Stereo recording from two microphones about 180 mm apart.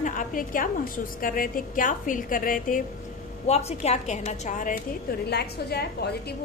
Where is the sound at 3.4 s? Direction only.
35° left (ahead or behind).